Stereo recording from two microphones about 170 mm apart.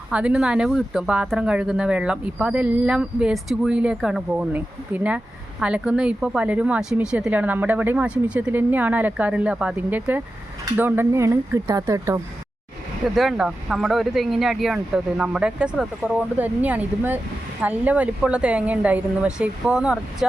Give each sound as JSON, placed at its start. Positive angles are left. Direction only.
{"t": 0.1, "sound": "speech", "side_deg": -5}
{"t": 13.1, "sound": "speech", "side_deg": 0}